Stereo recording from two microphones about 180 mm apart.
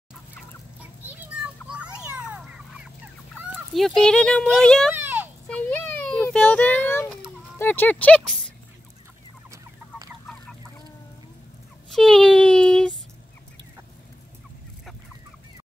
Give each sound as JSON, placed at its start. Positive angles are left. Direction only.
{"t": 1.0, "sound": "children playing", "side_deg": -10}
{"t": 3.7, "sound": "speech", "side_deg": 0}
{"t": 4.9, "sound": "a sound", "side_deg": -10}
{"t": 5.5, "sound": "a sound", "side_deg": 10}
{"t": 7.5, "sound": "speech", "side_deg": 10}
{"t": 9.5, "sound": "chicken", "side_deg": -20}
{"t": 11.9, "sound": "child singing", "side_deg": 0}